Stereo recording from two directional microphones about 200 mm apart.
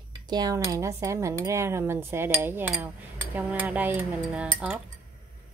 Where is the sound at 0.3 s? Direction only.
20° right (ahead or behind).